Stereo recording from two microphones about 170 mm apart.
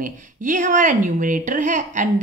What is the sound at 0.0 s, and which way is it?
A woman's voice, 50° right (ahead or behind).